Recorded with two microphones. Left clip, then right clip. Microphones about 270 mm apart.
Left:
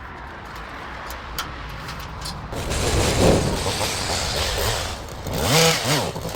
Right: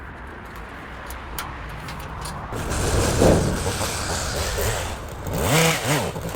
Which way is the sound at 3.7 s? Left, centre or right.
Left.